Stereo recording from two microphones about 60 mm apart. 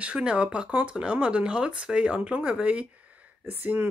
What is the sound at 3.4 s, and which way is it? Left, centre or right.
Speech, right.